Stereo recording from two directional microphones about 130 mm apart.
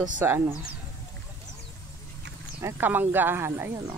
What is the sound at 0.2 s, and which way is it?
Speech, 20° right (ahead or behind).